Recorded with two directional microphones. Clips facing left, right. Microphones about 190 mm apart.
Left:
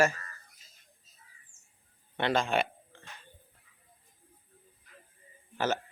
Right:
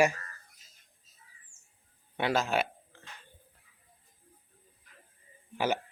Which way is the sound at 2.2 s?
5° right (ahead or behind).